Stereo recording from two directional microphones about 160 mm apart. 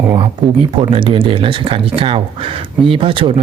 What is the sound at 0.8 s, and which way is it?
Speech, 35° right (ahead or behind).